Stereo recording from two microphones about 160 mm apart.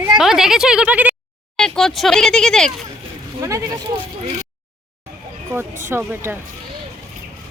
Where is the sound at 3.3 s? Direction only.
20° right (ahead or behind).